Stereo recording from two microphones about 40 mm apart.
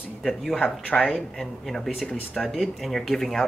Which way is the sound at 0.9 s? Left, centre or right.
Left.